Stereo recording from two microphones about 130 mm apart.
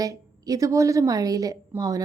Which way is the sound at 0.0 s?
25° right (ahead or behind).